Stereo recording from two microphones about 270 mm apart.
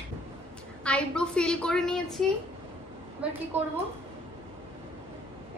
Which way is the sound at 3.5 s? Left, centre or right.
Centre.